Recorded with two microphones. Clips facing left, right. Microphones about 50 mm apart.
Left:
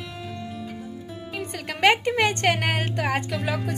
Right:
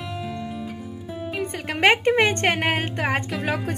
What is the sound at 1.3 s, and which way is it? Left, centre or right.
A woman's voice, right.